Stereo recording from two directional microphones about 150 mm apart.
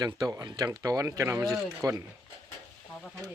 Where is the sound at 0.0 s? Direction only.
25° right (ahead or behind).